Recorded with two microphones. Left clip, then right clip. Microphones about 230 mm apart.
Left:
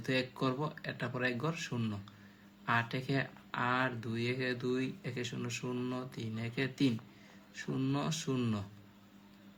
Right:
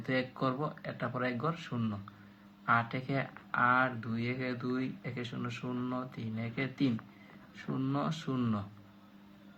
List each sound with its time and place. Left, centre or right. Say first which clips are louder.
0.0 s speech: right 1 dB; left